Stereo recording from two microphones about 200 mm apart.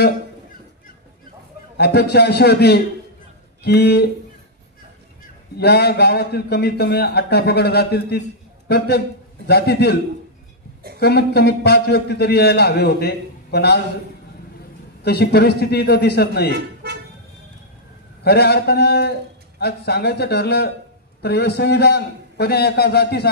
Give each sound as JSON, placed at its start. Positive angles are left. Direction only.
{"t": 1.8, "sound": "a man's voice", "side_deg": 55}
{"t": 5.6, "sound": "a man's voice", "side_deg": 55}
{"t": 11.0, "sound": "a man's voice", "side_deg": 55}
{"t": 15.0, "sound": "a man's voice", "side_deg": 55}
{"t": 18.2, "sound": "a man's voice", "side_deg": 55}